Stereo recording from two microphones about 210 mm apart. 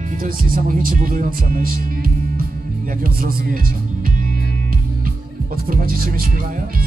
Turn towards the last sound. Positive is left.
turn(degrees=-45)  # may be behind; listen again after turning